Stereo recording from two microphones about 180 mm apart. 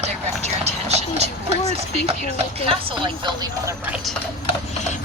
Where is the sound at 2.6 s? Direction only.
30° right (ahead or behind).